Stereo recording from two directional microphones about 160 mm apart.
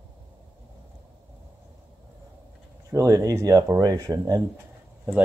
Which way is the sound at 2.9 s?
20° right (ahead or behind).